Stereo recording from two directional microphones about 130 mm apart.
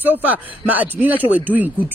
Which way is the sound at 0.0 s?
15° right (ahead or behind).